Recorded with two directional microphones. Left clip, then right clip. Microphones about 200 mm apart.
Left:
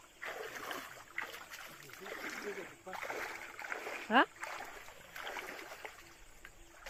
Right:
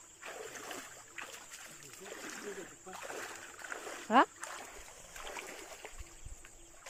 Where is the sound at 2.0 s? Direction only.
20° right (ahead or behind); by 4.1 s 40° right (ahead or behind).